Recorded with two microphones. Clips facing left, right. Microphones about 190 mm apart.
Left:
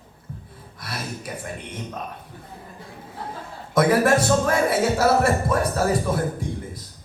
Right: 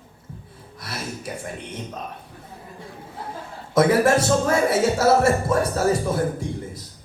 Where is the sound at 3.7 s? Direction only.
25° right (ahead or behind).